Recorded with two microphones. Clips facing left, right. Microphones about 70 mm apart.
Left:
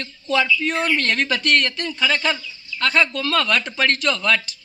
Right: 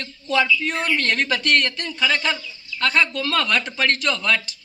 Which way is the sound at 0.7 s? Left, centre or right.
Centre.